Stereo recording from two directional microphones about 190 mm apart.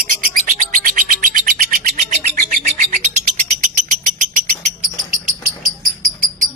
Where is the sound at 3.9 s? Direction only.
45° right (ahead or behind).